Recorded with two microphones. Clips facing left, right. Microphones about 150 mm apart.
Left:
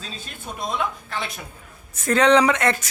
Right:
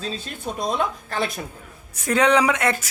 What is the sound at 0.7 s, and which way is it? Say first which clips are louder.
Speech: right 1 dB; 40° right (ahead or behind).